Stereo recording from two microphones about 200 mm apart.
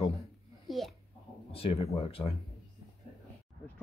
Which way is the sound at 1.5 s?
30° left (ahead or behind).